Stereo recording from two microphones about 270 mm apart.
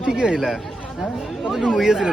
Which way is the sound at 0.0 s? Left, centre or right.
Centre.